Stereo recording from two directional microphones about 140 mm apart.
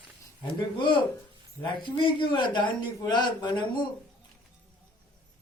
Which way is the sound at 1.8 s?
35° left (ahead or behind).